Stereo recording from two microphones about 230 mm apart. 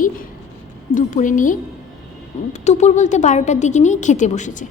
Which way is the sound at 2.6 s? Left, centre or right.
Left.